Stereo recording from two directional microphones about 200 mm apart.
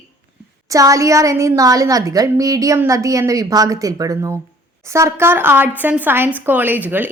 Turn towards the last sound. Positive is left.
turn(degrees=-10)  # may be behind; listen again after turning